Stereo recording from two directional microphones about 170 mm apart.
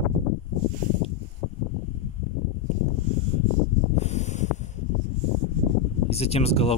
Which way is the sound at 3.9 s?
40° left (ahead or behind).